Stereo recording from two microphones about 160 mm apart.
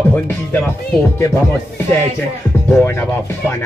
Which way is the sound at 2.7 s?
15° left (ahead or behind).